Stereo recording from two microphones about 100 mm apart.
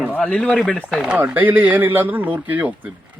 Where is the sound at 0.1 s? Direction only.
15° left (ahead or behind).